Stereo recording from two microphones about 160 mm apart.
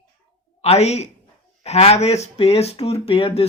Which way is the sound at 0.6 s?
40° left (ahead or behind).